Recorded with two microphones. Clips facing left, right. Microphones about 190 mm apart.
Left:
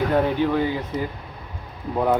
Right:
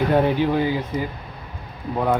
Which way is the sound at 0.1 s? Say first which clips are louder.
Right 2 dB; 20° right (ahead or behind).